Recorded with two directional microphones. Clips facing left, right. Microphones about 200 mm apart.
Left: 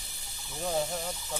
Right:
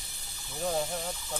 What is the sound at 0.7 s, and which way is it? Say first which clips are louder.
Speech: left 1 dB; 5° left (ahead or behind).